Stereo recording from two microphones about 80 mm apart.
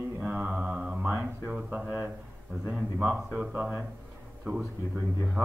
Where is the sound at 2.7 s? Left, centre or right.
Centre.